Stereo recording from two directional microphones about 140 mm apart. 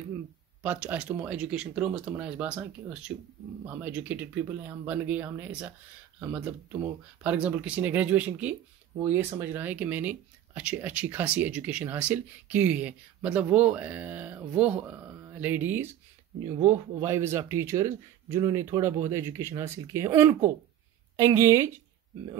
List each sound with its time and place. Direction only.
0.6 s speech: 10° right (ahead or behind)